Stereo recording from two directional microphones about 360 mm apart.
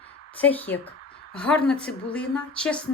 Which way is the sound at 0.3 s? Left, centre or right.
Centre.